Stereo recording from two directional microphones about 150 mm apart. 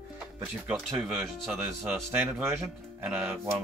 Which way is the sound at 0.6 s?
5° right (ahead or behind).